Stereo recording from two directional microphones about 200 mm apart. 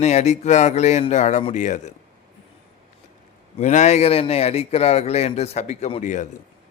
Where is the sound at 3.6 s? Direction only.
35° left (ahead or behind).